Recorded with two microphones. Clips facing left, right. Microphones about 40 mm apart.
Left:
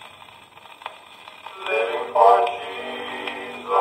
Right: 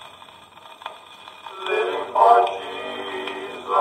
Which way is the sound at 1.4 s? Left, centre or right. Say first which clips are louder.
Right 1 dB; left.